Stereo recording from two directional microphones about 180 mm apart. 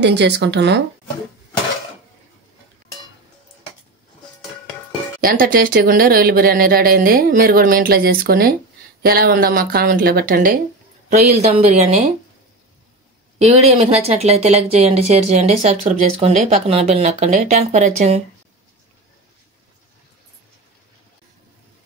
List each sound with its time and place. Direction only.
0.0 s speech: 70° right (ahead or behind)
5.2 s speech: 50° right (ahead or behind)
11.1 s speech: 40° right (ahead or behind)
13.4 s speech: 35° right (ahead or behind)